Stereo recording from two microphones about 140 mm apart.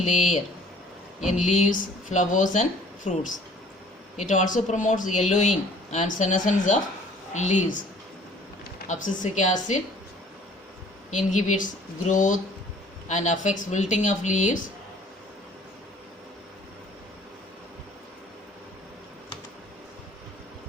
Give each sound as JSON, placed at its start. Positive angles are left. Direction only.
{"t": 0.0, "sound": "speech", "side_deg": 60}
{"t": 1.5, "sound": "speech", "side_deg": 60}
{"t": 8.9, "sound": "speech", "side_deg": 65}
{"t": 11.1, "sound": "speech", "side_deg": 60}